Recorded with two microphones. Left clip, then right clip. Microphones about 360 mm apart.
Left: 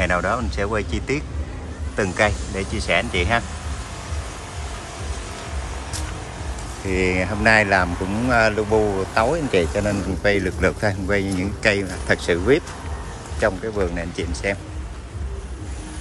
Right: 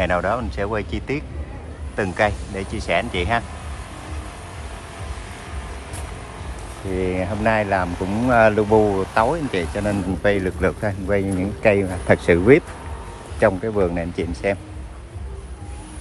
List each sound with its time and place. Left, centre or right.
0.0 s speech: centre
7.0 s speech: centre
8.6 s speech: right
9.1 s speech: centre